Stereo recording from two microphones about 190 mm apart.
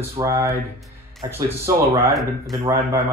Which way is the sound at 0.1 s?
15° right (ahead or behind).